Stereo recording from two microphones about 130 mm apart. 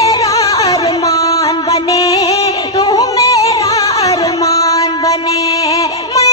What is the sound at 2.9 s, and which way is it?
Yodeling, 25° left (ahead or behind).